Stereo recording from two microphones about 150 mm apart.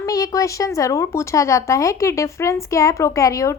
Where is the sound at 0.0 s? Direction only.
25° left (ahead or behind).